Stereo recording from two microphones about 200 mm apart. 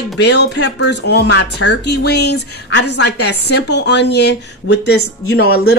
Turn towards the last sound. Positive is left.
turn(degrees=50)  # may be behind; listen again after turning